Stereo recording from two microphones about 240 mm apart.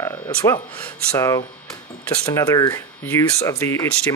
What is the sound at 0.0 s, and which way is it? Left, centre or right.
Speech, centre.